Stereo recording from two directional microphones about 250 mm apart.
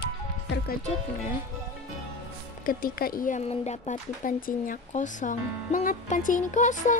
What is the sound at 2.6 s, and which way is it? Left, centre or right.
Speech, left.